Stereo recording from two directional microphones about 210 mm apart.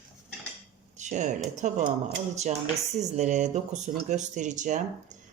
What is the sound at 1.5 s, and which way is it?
Speech, 35° right (ahead or behind).